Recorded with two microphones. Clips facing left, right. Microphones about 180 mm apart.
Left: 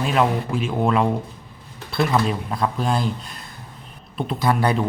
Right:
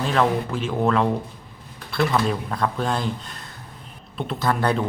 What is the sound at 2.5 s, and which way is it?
Speech, 10° left (ahead or behind).